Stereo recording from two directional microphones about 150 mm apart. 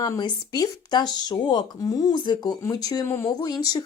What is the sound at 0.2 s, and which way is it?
A woman's voice, 30° left (ahead or behind).